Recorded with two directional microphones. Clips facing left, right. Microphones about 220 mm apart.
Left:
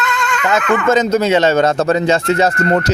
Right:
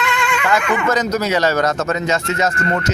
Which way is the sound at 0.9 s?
25° left (ahead or behind).